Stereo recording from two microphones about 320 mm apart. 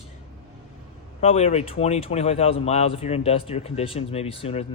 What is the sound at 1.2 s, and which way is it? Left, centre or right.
Speech, centre.